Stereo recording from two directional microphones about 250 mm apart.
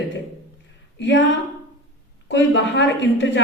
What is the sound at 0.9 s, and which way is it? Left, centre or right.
A woman's voice, left.